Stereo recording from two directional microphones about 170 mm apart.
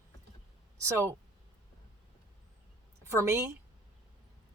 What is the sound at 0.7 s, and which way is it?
Speech, 15° right (ahead or behind).